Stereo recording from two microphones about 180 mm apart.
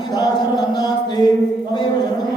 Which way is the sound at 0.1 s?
20° left (ahead or behind).